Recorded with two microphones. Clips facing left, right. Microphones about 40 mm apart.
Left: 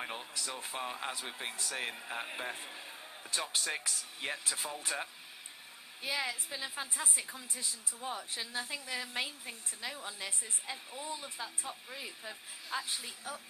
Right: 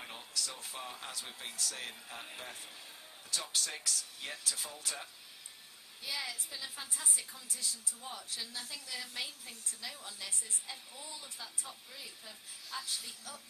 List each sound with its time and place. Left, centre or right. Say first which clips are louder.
0.0 s a woman's voice: left 3 dB; left